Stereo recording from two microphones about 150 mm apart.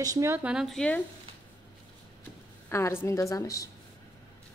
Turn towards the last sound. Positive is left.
turn(degrees=25)  # may be behind; listen again after turning